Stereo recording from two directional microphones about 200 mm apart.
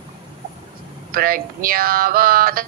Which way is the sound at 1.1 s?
45° right (ahead or behind).